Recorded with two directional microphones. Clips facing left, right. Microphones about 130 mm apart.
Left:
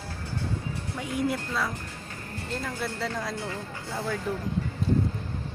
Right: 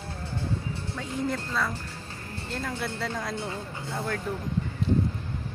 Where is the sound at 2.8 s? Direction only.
Centre (ahead or behind).